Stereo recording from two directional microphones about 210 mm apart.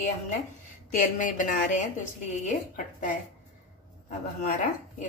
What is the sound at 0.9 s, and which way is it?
A woman's voice, 35° left (ahead or behind).